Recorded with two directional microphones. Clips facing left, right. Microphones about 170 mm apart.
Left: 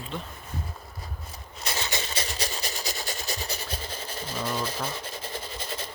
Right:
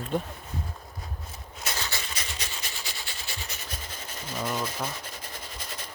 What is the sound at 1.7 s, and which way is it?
Rub, 20° left (ahead or behind).